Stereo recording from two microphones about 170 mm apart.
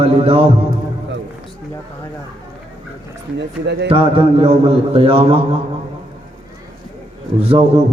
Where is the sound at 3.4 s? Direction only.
90° right.